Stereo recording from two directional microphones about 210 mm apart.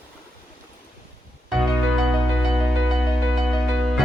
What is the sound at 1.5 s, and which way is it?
Music, centre (ahead or behind).